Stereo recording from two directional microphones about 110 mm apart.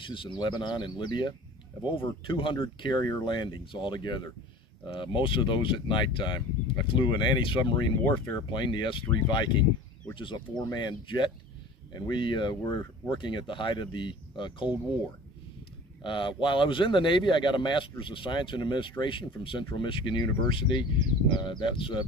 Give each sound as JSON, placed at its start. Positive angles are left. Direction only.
{"t": 0.1, "sound": "speech", "side_deg": 50}
{"t": 16.0, "sound": "speech", "side_deg": 50}